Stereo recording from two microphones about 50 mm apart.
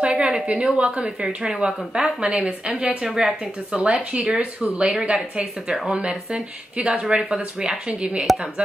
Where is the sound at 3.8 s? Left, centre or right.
Right.